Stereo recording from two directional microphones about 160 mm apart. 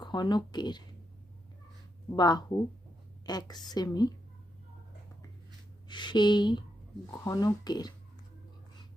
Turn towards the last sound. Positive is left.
turn(degrees=25)  # may be behind; listen again after turning